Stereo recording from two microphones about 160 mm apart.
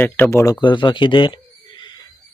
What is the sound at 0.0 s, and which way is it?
Speech, 15° left (ahead or behind).